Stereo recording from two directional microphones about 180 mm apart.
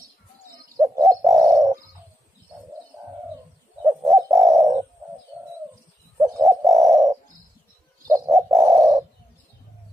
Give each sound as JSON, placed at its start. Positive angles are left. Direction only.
{"t": 0.7, "sound": "bird", "side_deg": -20}
{"t": 4.1, "sound": "bird", "side_deg": -15}
{"t": 6.1, "sound": "bird", "side_deg": -15}